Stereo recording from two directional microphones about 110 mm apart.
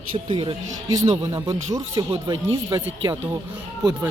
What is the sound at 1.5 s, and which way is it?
Speech, 30° right (ahead or behind).